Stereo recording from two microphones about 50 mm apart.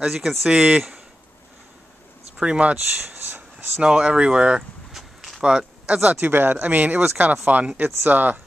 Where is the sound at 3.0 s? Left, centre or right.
Right.